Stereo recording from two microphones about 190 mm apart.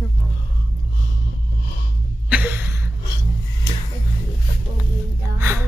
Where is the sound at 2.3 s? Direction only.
10° right (ahead or behind).